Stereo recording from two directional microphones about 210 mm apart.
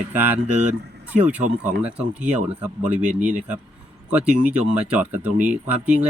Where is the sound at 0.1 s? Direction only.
10° right (ahead or behind).